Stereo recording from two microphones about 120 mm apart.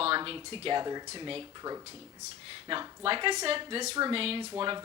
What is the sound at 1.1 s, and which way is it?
A woman's voice, 50° right (ahead or behind).